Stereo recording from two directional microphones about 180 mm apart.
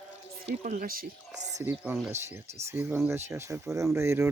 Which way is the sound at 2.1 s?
15° right (ahead or behind).